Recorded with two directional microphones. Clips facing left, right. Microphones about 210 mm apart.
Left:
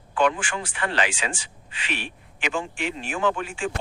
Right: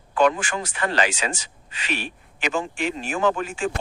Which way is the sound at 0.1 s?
40° right (ahead or behind).